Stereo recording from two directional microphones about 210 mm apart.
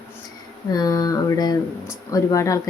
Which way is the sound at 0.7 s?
20° left (ahead or behind).